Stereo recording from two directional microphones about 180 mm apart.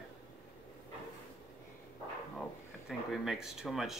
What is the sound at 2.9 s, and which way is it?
Speech, centre (ahead or behind).